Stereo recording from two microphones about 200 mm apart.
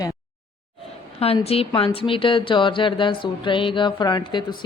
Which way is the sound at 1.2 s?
30° left (ahead or behind).